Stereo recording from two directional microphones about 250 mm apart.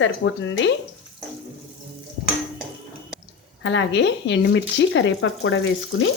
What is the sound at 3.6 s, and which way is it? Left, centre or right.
A woman's voice, left.